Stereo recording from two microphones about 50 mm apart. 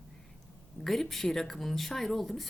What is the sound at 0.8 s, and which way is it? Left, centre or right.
Speech, centre.